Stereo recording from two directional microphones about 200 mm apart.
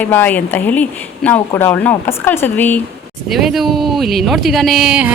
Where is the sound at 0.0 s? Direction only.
10° left (ahead or behind).